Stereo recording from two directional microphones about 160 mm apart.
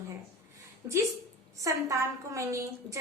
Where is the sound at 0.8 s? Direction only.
15° right (ahead or behind).